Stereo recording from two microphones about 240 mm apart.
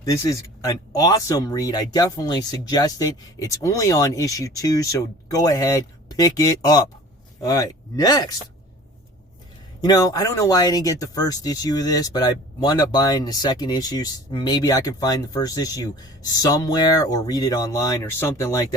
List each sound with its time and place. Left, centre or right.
0.0 s speech: centre
9.8 s speech: centre